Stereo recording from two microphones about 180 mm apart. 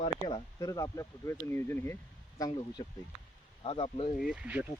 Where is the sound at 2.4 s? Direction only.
25° left (ahead or behind).